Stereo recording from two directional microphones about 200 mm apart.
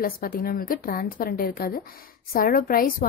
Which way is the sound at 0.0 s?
45° left (ahead or behind).